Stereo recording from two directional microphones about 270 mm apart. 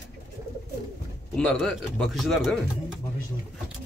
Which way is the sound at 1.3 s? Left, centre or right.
Centre.